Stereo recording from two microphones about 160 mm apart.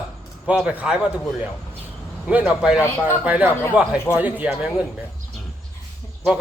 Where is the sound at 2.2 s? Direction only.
5° right (ahead or behind).